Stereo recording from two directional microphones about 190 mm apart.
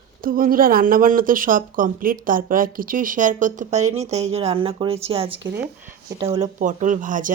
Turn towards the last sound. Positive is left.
turn(degrees=-45)  # may be behind; listen again after turning